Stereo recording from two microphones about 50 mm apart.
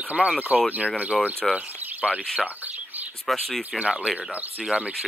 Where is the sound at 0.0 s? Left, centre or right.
Right.